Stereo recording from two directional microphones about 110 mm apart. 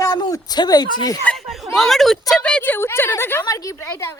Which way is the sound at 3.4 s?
30° left (ahead or behind).